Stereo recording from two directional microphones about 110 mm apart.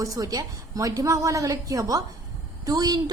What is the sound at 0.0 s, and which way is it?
A woman's voice, 30° right (ahead or behind).